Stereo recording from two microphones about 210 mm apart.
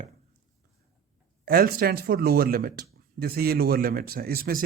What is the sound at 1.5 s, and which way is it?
Speech, 45° right (ahead or behind).